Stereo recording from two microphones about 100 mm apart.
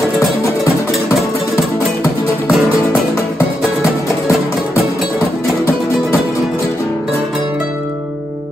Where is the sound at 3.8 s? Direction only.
30° left (ahead or behind).